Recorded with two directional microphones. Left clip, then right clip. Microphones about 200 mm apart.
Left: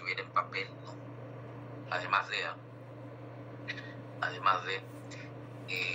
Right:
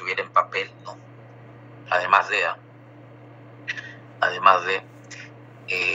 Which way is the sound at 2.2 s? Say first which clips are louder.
Right 12 dB; 50° right (ahead or behind).